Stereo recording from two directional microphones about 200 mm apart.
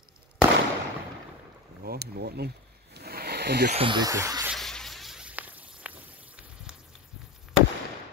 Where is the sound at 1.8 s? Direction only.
50° right (ahead or behind).